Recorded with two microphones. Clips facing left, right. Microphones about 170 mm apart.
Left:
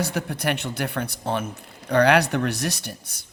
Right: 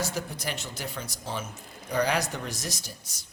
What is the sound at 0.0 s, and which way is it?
Speech, 65° left (ahead or behind).